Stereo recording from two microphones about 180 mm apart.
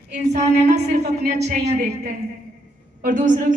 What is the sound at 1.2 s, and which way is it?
A woman's voice, 60° right (ahead or behind).